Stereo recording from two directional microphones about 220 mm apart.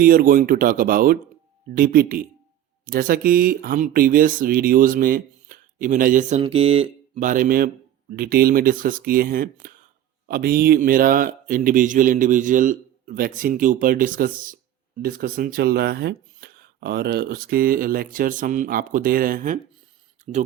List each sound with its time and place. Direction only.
0.0 s speech: 40° right (ahead or behind)